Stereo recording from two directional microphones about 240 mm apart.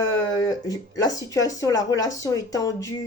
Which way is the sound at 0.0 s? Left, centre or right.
Centre.